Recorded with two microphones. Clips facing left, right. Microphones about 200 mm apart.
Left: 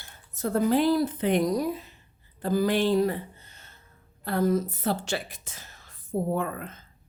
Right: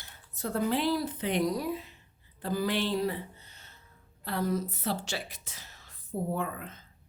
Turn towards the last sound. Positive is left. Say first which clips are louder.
# left 5 dB
turn(degrees=55)  # may be behind; listen again after turning